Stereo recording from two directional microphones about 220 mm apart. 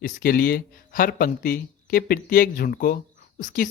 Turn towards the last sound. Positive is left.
turn(degrees=35)  # may be behind; listen again after turning